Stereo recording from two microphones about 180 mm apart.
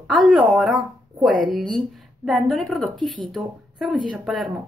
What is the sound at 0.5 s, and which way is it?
A woman's voice, centre (ahead or behind).